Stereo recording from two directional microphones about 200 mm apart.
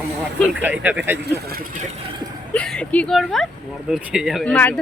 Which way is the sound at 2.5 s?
5° left (ahead or behind).